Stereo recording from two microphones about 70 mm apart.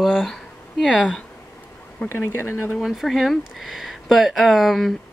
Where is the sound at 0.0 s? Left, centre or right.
Centre.